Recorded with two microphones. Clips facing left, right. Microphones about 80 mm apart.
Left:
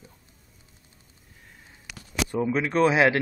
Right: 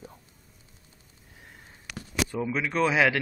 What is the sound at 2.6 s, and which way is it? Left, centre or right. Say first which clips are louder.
Speech: left 3 dB; left.